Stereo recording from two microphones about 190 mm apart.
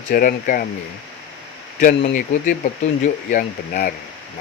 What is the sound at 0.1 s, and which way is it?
Speech, 50° left (ahead or behind).